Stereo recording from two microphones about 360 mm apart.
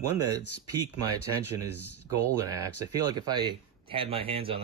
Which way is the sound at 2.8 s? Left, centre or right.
Centre.